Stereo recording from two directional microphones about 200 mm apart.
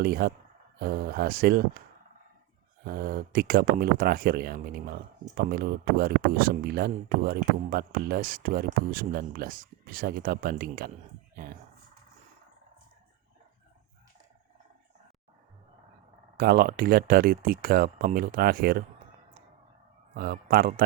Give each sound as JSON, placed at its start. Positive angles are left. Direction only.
{"t": 0.0, "sound": "speech", "side_deg": -50}
{"t": 2.8, "sound": "speech", "side_deg": -50}
{"t": 16.4, "sound": "speech", "side_deg": -45}
{"t": 20.1, "sound": "speech", "side_deg": -45}